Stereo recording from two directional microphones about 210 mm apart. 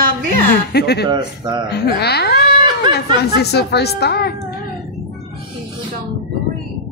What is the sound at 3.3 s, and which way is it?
A woman's voice, 50° left (ahead or behind).